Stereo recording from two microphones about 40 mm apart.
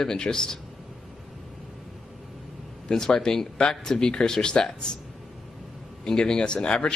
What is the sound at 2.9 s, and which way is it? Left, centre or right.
Speech, centre.